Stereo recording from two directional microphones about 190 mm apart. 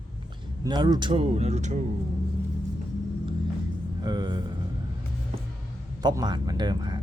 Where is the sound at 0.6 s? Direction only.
20° right (ahead or behind); by 1.8 s 35° right (ahead or behind).